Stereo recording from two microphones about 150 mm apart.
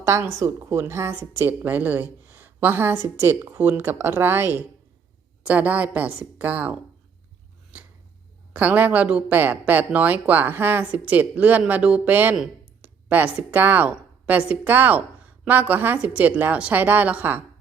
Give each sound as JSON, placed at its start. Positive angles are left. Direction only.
{"t": 0.0, "sound": "speech", "side_deg": -20}
{"t": 8.5, "sound": "speech", "side_deg": -10}